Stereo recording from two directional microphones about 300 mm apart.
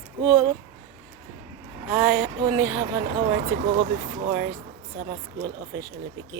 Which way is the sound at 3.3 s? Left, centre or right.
Right.